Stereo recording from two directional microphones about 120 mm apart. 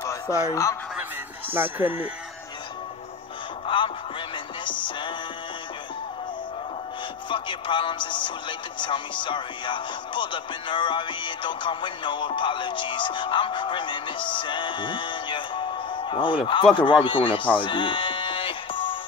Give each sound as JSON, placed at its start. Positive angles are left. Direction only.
{"t": 0.0, "sound": "speech", "side_deg": 25}
{"t": 1.5, "sound": "speech", "side_deg": -15}
{"t": 3.6, "sound": "music", "side_deg": 45}
{"t": 4.6, "sound": "speech", "side_deg": 45}
{"t": 7.2, "sound": "speech", "side_deg": 45}
{"t": 17.6, "sound": "music", "side_deg": 45}